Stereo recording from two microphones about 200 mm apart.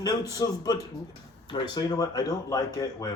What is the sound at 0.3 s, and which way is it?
A man's voice, 15° left (ahead or behind).